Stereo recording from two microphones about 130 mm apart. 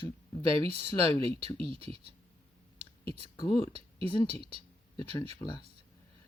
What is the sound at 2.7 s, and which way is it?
Whispering, 45° right (ahead or behind).